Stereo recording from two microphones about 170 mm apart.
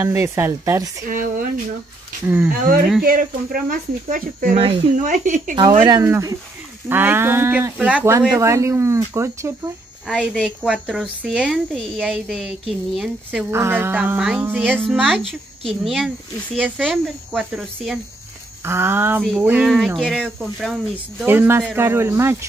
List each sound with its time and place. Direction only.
0.0 s speech: 15° right (ahead or behind)
1.0 s speech: 55° right (ahead or behind)
2.2 s speech: 10° right (ahead or behind)
2.5 s speech: 55° right (ahead or behind)
5.6 s speech: 30° right (ahead or behind)
6.0 s speech: 15° right (ahead or behind)
10.0 s a woman's voice: 5° right (ahead or behind)
13.5 s speech: 15° right (ahead or behind)
14.8 s a woman's voice: 5° left (ahead or behind); by 22.4 s 15° right (ahead or behind)